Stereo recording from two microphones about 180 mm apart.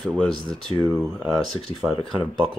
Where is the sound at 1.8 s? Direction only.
5° right (ahead or behind).